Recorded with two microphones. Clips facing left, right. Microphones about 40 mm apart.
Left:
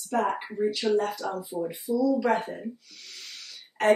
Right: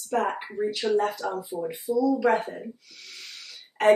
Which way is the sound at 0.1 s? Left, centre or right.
Centre.